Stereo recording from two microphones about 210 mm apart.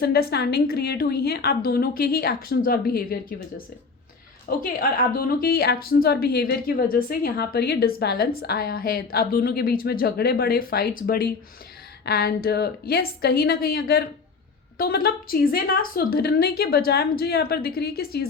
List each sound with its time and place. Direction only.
0.0 s a woman's voice: 50° left (ahead or behind)
4.4 s a woman's voice: 40° left (ahead or behind)